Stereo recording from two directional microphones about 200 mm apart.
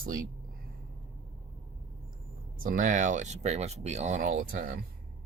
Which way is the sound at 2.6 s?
45° right (ahead or behind).